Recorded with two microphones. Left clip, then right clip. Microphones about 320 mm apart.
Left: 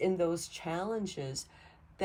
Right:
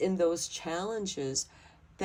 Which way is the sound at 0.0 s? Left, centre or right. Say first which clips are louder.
Right 2 dB; right.